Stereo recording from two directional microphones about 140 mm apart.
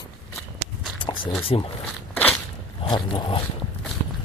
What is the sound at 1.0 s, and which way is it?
Speech, 35° left (ahead or behind).